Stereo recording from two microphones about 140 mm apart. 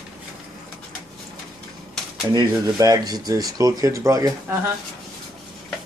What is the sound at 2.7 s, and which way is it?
Speech, 25° right (ahead or behind).